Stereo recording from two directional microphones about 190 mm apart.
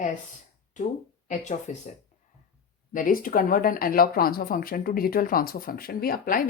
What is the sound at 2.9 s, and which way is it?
Speech, 45° left (ahead or behind).